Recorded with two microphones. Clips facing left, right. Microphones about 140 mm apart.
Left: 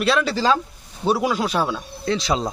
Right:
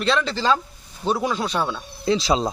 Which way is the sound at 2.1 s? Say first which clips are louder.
Right 2 dB; 25° right (ahead or behind).